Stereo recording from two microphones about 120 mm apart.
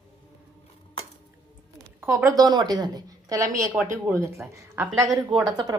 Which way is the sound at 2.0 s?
20° right (ahead or behind).